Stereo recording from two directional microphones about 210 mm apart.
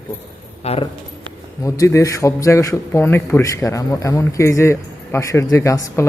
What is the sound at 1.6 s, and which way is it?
A man's voice, 15° left (ahead or behind).